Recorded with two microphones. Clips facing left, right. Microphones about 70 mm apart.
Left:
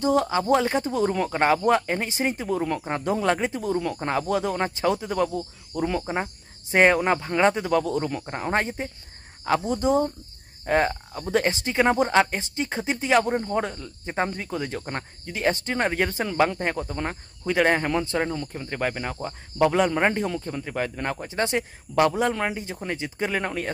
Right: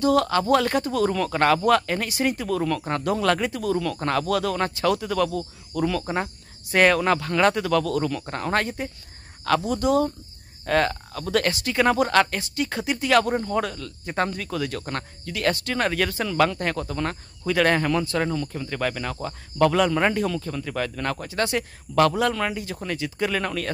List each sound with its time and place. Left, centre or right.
0.0 s speech: centre